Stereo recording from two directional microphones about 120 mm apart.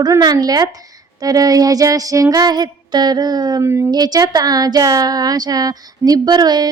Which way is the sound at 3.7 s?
25° right (ahead or behind).